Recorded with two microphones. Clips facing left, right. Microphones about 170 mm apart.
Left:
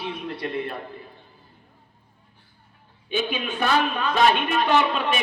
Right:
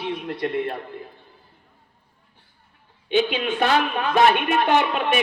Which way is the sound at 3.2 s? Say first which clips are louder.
Right 5 dB; 70° right (ahead or behind).